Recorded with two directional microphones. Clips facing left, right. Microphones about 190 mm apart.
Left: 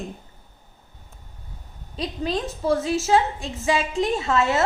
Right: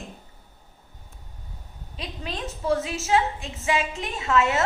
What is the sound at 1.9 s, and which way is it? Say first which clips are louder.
A woman's voice: left 8 dB; 35° left (ahead or behind).